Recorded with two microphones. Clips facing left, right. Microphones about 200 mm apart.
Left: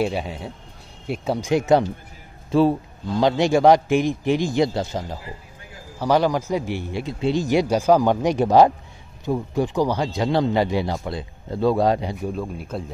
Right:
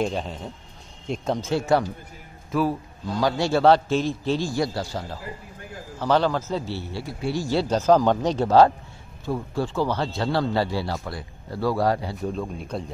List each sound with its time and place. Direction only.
0.0 s a man's voice: 10° left (ahead or behind)
12.3 s speech: 5° left (ahead or behind)